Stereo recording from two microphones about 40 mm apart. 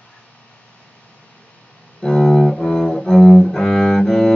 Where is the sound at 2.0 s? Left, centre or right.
Centre.